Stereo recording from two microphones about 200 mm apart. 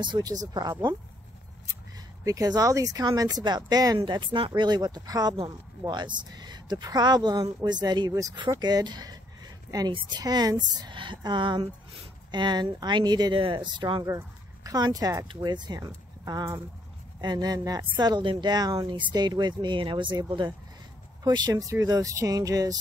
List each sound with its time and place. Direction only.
0.0 s speech: 20° right (ahead or behind)
2.2 s speech: 20° right (ahead or behind)